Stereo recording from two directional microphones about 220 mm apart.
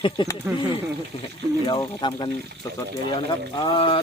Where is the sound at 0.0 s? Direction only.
20° left (ahead or behind).